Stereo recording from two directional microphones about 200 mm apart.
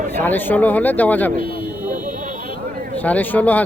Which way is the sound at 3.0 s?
10° left (ahead or behind).